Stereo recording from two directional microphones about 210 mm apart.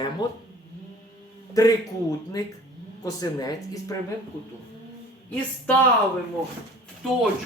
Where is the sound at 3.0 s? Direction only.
15° left (ahead or behind).